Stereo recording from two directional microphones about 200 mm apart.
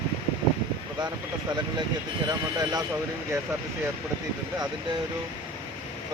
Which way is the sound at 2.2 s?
20° right (ahead or behind).